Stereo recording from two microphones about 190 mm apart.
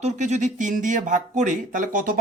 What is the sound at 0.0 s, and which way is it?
Speech, 40° right (ahead or behind).